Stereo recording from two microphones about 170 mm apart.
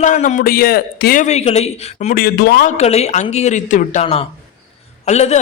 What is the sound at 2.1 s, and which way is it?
Speech, 65° left (ahead or behind).